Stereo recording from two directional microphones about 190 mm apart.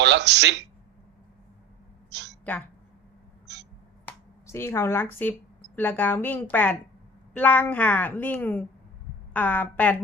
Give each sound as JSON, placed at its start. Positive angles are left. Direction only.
{"t": 0.0, "sound": "speech", "side_deg": -65}
{"t": 2.0, "sound": "a sound", "side_deg": -65}
{"t": 2.4, "sound": "a woman's voice", "side_deg": 10}
{"t": 3.4, "sound": "a sound", "side_deg": -65}
{"t": 4.0, "sound": "finger snapping", "side_deg": 15}
{"t": 5.7, "sound": "a woman's voice", "side_deg": 10}